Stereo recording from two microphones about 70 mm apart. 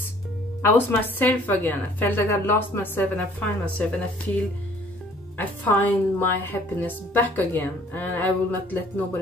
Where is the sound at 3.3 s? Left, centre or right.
Centre.